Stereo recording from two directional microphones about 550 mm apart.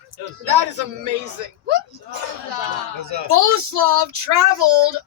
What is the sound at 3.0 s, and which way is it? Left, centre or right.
Speech, right.